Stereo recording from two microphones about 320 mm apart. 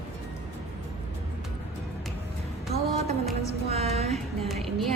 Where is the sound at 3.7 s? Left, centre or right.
Centre.